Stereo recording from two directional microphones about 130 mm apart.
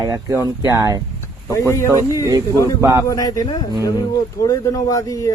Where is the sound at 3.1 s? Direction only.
25° left (ahead or behind).